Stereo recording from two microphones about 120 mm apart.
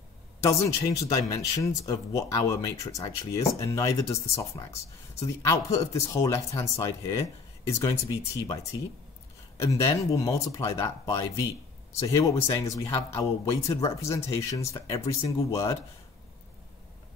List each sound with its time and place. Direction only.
0.4 s speech: 25° left (ahead or behind)
9.6 s speech: 25° left (ahead or behind)